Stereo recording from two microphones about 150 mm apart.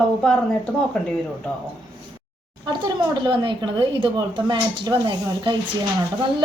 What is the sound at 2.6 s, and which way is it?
Speech, 30° right (ahead or behind).